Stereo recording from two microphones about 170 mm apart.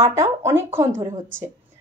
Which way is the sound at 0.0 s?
15° right (ahead or behind).